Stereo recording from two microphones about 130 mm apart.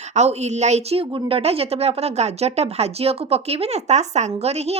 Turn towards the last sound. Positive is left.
turn(degrees=-55)  # may be behind; listen again after turning